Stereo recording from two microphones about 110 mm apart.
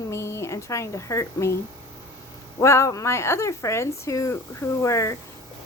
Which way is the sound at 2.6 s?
25° left (ahead or behind).